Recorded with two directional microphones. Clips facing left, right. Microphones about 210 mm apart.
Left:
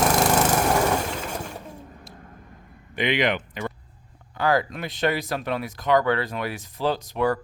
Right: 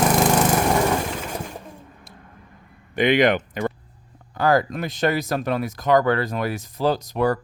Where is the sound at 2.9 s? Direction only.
45° right (ahead or behind).